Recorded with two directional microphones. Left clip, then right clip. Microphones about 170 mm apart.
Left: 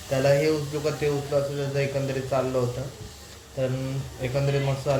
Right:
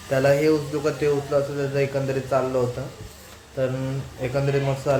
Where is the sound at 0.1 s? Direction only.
20° right (ahead or behind).